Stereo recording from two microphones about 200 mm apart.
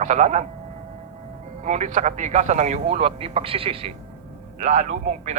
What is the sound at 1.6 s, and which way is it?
Speech, 35° right (ahead or behind).